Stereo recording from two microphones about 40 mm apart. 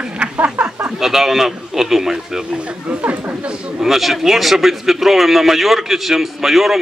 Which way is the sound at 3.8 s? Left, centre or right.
Centre.